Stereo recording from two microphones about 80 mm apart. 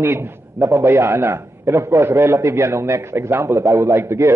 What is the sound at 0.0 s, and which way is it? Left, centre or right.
A man's voice, right.